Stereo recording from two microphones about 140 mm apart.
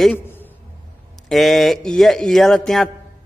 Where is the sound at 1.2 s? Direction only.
Centre (ahead or behind).